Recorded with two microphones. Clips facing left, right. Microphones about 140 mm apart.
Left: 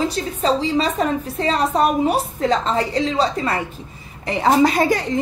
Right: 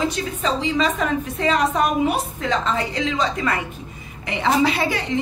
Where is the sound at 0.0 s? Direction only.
35° left (ahead or behind).